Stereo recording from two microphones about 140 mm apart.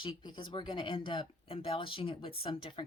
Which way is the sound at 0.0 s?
35° left (ahead or behind).